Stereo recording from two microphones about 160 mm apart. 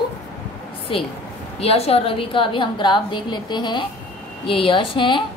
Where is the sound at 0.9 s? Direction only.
35° left (ahead or behind).